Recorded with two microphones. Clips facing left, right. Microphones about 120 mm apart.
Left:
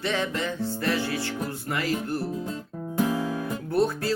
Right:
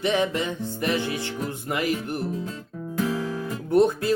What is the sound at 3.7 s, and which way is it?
Speech, 20° right (ahead or behind).